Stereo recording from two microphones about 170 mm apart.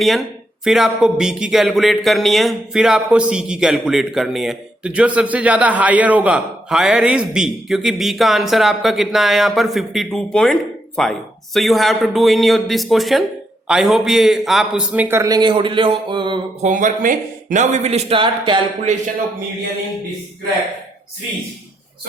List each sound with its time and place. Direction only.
0.0 s a man's voice: centre (ahead or behind); by 16.4 s 30° right (ahead or behind)
16.6 s speech: 50° right (ahead or behind); by 18.6 s 30° right (ahead or behind)